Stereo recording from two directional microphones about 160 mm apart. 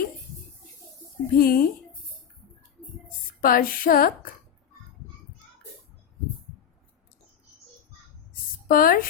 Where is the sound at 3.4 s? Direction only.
60° left (ahead or behind).